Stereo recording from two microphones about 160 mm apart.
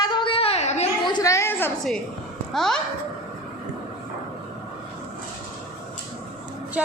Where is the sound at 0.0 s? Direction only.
30° left (ahead or behind).